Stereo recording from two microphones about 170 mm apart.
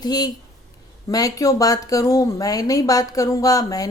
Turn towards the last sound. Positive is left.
turn(degrees=20)  # may be behind; listen again after turning